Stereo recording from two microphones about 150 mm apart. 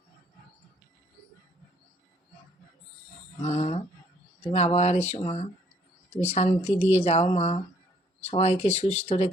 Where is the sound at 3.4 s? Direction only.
45° left (ahead or behind).